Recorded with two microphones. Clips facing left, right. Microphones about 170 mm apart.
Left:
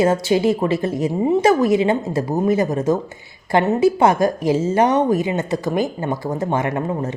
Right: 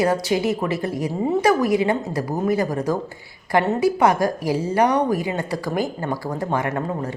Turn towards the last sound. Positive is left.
turn(degrees=20)  # may be behind; listen again after turning